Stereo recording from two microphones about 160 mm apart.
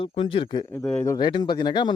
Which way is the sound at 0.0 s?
35° left (ahead or behind).